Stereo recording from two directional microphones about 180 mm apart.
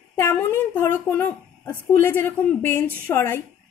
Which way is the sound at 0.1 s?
10° left (ahead or behind).